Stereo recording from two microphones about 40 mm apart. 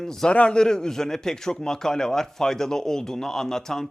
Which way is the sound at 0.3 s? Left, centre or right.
Left.